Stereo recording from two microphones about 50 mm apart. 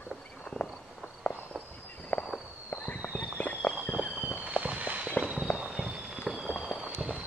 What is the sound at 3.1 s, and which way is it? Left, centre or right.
Walk, left.